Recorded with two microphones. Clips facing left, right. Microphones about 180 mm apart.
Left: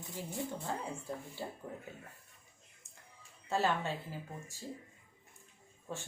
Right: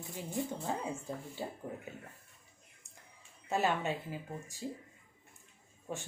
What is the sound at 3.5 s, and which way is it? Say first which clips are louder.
Speech: right 1 dB; 15° right (ahead or behind).